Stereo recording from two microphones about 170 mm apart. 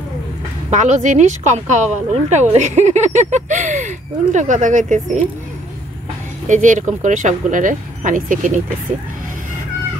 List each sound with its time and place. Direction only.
0.7 s speech: 45° right (ahead or behind)
6.4 s speech: 45° right (ahead or behind)